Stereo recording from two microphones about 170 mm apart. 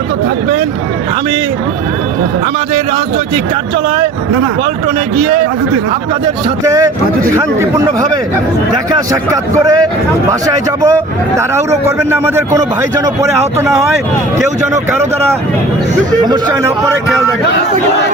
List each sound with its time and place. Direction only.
6.7 s a man's voice: 20° right (ahead or behind)
16.2 s a man's voice: 25° right (ahead or behind)